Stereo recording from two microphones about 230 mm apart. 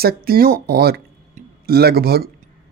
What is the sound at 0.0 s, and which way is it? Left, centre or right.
Speech, right.